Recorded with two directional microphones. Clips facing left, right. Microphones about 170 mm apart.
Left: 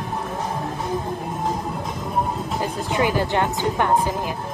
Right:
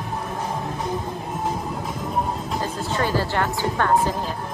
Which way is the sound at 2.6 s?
15° left (ahead or behind).